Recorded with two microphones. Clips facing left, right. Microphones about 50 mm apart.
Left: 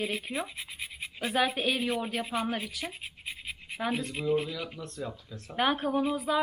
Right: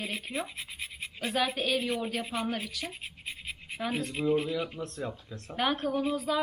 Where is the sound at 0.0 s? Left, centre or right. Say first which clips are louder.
Left 2 dB; centre.